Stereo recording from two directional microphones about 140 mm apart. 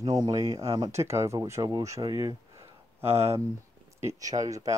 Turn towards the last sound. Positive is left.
turn(degrees=-25)  # may be behind; listen again after turning